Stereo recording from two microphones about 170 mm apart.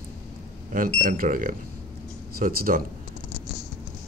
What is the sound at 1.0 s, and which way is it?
Speech, 55° right (ahead or behind).